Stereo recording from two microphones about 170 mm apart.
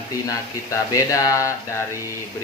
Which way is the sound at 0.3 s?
20° left (ahead or behind).